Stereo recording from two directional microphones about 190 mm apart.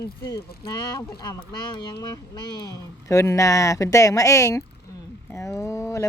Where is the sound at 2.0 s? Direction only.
20° left (ahead or behind).